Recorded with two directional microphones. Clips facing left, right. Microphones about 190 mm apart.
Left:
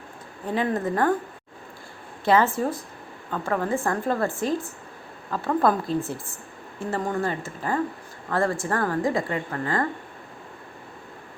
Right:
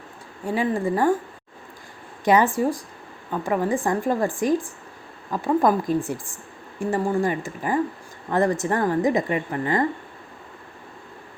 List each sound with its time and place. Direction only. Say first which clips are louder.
0.4 s a woman's voice: right 2 dB; 10° right (ahead or behind)
2.2 s a woman's voice: right 2 dB; 15° right (ahead or behind)